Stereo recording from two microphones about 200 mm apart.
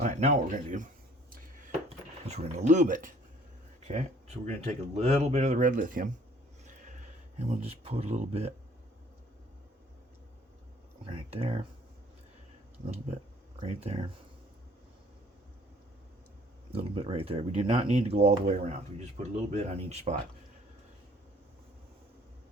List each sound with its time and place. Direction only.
0.0 s speech: 35° right (ahead or behind)
1.9 s speech: 35° right (ahead or behind)
7.3 s speech: 30° right (ahead or behind)
11.0 s speech: 25° right (ahead or behind)
13.6 s speech: 30° right (ahead or behind)
16.7 s speech: 30° right (ahead or behind)